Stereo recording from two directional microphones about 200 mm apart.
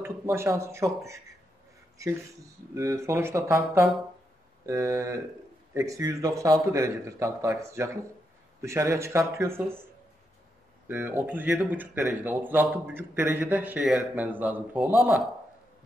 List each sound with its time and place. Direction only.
0.0 s speech: 10° right (ahead or behind)
10.9 s speech: 10° right (ahead or behind)